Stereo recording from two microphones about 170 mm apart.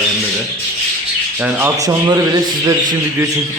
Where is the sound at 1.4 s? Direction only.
10° right (ahead or behind).